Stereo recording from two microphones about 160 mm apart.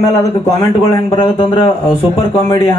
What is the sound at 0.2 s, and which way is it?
Speech, 20° left (ahead or behind).